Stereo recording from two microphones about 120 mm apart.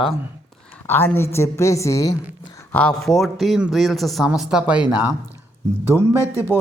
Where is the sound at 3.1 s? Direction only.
Centre (ahead or behind).